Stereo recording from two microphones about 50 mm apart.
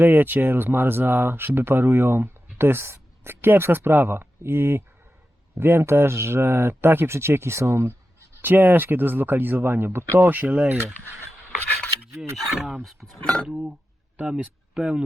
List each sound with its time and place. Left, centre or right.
0.0 s speech: right
8.4 s speech: right
10.2 s speech: right
10.8 s speech: right
12.5 s speech: centre
13.5 s speech: centre